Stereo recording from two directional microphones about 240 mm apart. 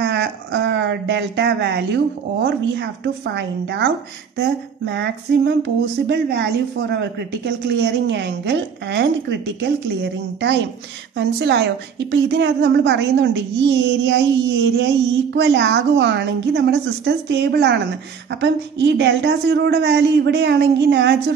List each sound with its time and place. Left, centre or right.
0.0 s a sound: right
2.4 s a woman's voice: right
11.1 s a woman's voice: right